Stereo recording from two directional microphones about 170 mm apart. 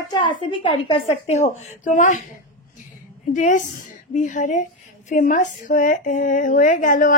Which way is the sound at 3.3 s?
50° left (ahead or behind).